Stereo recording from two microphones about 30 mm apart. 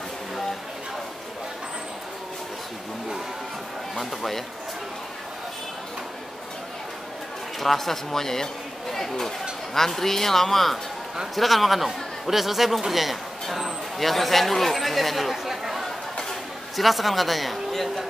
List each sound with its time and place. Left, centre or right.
3.9 s speech: centre
7.6 s a man's voice: centre